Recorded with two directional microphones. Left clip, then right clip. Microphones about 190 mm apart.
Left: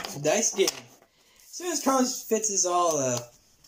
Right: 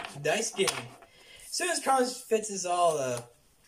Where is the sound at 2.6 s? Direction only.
20° left (ahead or behind).